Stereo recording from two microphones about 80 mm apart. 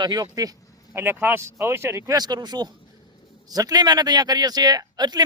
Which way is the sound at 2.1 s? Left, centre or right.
Right.